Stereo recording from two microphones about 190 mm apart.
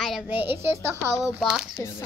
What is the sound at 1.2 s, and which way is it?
Speech, centre (ahead or behind).